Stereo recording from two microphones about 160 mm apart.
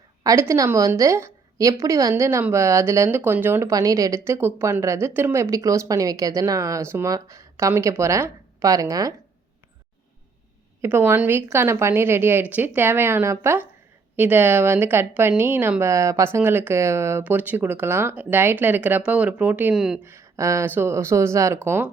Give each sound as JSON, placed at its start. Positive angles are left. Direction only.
{"t": 0.2, "sound": "a woman's voice", "side_deg": -20}
{"t": 10.8, "sound": "speech", "side_deg": -15}
{"t": 20.1, "sound": "speech", "side_deg": -20}